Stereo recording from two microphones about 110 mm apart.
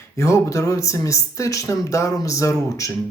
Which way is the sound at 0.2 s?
25° left (ahead or behind).